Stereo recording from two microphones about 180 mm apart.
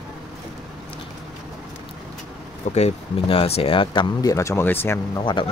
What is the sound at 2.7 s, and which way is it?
Speech, 35° left (ahead or behind).